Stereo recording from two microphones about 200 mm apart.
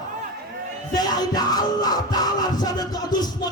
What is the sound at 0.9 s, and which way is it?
Music, 20° left (ahead or behind).